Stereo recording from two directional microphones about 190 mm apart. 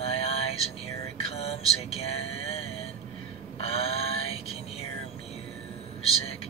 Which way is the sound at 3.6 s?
35° left (ahead or behind).